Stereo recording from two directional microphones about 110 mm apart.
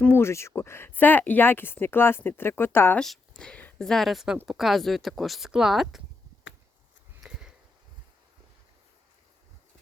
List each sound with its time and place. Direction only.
0.1 s speech: 25° left (ahead or behind)
3.0 s a sound: 5° left (ahead or behind)
3.8 s speech: centre (ahead or behind)
7.2 s sniff: 5° right (ahead or behind)